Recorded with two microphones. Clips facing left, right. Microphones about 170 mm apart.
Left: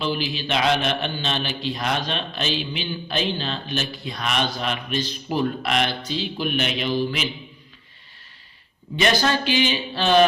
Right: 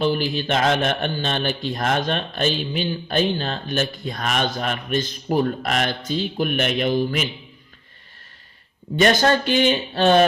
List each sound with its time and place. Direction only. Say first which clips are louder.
0.0 s a man's voice: right 5 dB; 50° right (ahead or behind)
9.0 s a man's voice: right 4 dB; 50° right (ahead or behind)